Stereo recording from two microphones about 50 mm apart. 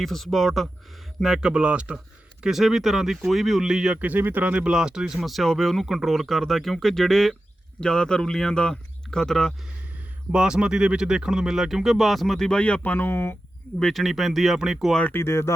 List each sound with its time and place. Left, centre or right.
0.0 s speech: centre
1.2 s speech: centre
2.4 s speech: centre
4.2 s speech: right; by 5.8 s centre
5.8 s speech: centre
7.8 s speech: centre
10.3 s speech: centre
12.5 s speech: left
13.1 s speech: left
13.9 s speech: centre
15.1 s speech: left